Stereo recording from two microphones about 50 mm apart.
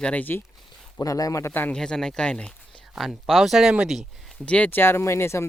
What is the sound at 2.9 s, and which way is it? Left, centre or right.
Speech, centre.